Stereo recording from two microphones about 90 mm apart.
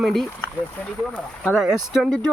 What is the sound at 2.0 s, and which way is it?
Speech, 10° left (ahead or behind).